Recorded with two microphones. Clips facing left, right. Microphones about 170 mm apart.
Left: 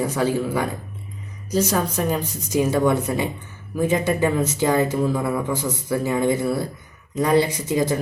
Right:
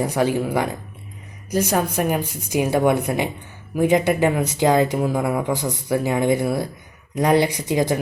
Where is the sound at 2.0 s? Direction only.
15° right (ahead or behind).